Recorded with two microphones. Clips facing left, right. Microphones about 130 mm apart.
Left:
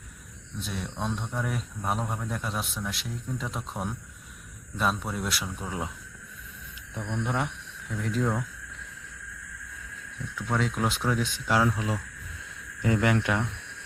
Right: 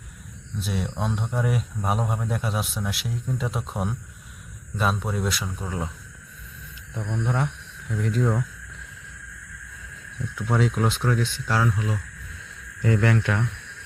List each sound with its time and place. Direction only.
0.6 s speech: 5° right (ahead or behind)
7.3 s speech: 5° left (ahead or behind)
10.3 s speech: 10° right (ahead or behind); by 13.5 s 15° left (ahead or behind)